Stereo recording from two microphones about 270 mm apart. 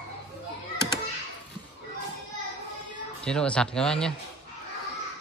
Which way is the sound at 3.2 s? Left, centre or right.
Centre.